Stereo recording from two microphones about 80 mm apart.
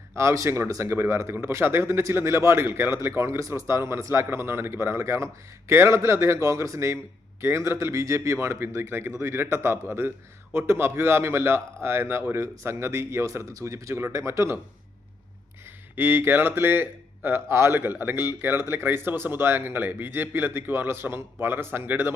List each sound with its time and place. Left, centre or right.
0.2 s speech: right
16.0 s speech: right